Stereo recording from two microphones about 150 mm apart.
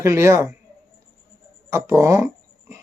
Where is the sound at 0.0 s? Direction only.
20° right (ahead or behind).